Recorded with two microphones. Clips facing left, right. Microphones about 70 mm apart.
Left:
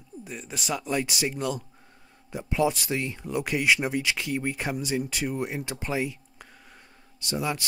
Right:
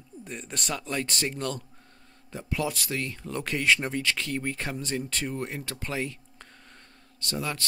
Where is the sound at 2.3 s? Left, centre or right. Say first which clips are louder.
Left 5 dB; centre.